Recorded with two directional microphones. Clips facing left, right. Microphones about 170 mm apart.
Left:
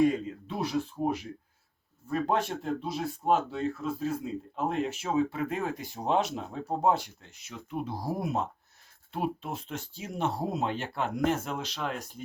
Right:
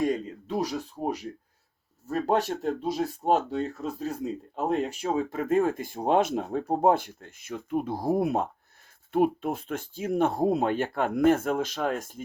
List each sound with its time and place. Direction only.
0.0 s speech: 40° right (ahead or behind)